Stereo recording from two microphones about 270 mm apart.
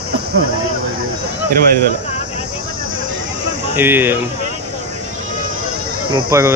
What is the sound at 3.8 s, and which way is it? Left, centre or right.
Speech, centre.